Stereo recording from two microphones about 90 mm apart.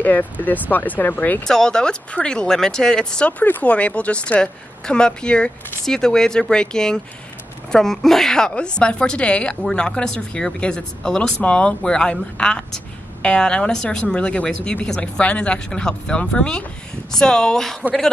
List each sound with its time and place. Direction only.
0.0 s speech: 20° left (ahead or behind)
1.4 s a woman's voice: 5° left (ahead or behind)